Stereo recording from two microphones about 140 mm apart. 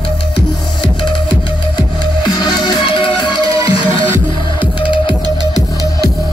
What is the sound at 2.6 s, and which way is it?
Music, 35° left (ahead or behind).